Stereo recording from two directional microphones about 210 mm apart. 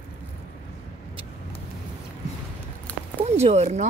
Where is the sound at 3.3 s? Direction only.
30° right (ahead or behind).